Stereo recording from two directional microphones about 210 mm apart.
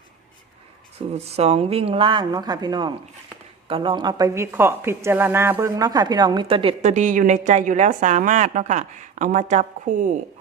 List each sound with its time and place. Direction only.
1.1 s a woman's voice: 30° right (ahead or behind)